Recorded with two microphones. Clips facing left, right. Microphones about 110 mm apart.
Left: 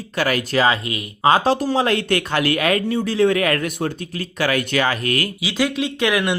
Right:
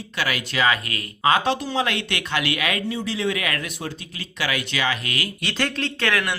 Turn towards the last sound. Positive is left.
turn(degrees=20)  # may be behind; listen again after turning